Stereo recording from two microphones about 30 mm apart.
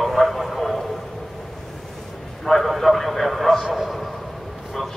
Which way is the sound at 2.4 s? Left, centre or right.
Centre.